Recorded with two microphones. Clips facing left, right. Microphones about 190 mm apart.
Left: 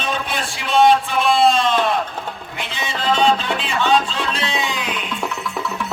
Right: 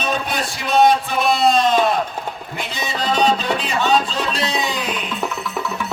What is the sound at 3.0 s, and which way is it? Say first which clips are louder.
Music: left 1 dB; 40° right (ahead or behind).